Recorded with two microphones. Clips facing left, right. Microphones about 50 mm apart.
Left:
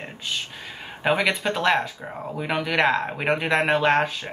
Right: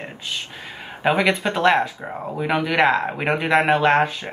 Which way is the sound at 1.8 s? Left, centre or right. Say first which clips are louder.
Right 4 dB; centre.